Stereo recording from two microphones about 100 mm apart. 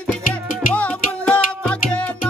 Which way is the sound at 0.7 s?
10° left (ahead or behind).